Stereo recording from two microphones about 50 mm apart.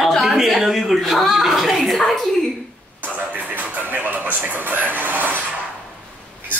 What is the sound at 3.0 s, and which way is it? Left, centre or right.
Television, right.